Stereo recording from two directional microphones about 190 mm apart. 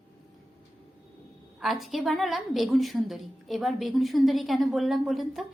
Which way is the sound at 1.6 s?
Centre (ahead or behind).